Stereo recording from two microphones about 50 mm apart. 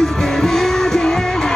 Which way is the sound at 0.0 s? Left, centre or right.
Centre.